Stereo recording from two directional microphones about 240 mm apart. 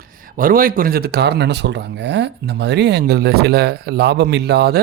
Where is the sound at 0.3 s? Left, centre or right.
Right.